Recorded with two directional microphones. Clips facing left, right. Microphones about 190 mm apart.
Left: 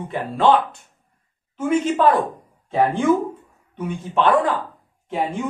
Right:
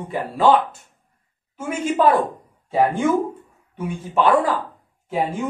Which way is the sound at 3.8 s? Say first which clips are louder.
Even; 10° right (ahead or behind).